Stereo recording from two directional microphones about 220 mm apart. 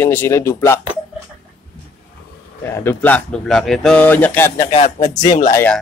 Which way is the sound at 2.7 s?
10° left (ahead or behind).